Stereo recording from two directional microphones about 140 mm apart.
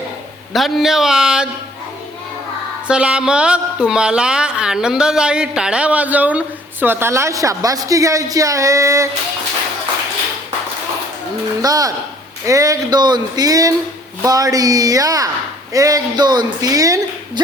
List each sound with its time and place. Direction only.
0.5 s a man's voice: centre (ahead or behind)
2.8 s a woman's voice: 10° right (ahead or behind)
11.6 s a woman's voice: 25° right (ahead or behind)